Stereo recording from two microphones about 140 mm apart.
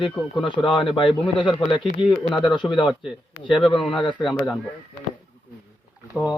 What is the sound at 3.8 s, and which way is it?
Speech, 5° left (ahead or behind).